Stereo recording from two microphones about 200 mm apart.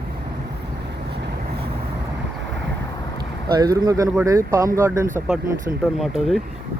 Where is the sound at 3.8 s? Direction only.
15° right (ahead or behind).